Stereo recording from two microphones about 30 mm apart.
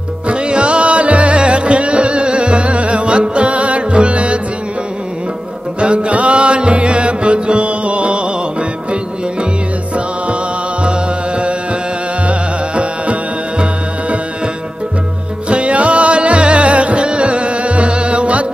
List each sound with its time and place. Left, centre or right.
0.3 s music: right
5.8 s music: right
10.8 s music: right
15.4 s music: right